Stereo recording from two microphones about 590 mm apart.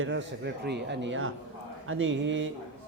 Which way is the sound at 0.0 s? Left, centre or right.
Centre.